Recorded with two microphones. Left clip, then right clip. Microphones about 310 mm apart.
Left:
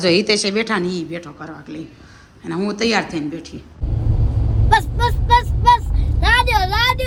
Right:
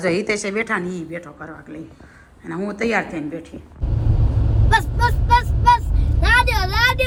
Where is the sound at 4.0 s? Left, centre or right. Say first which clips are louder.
Even; centre.